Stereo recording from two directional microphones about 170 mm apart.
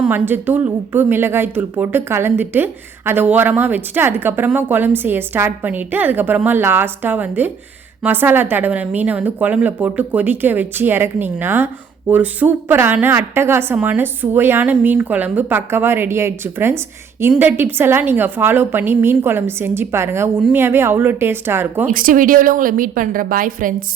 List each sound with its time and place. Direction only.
0.0 s a woman's voice: 10° right (ahead or behind)
21.9 s a woman's voice: 55° right (ahead or behind)